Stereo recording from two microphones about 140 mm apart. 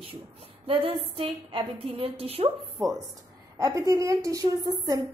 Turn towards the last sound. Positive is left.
turn(degrees=-25)  # may be behind; listen again after turning